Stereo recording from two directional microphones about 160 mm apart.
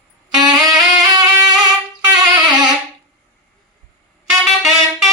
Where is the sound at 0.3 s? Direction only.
25° right (ahead or behind).